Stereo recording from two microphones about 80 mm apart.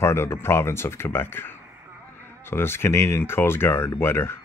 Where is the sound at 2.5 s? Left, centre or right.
Left.